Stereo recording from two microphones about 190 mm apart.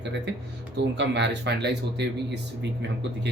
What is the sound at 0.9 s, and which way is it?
Speech, 65° right (ahead or behind).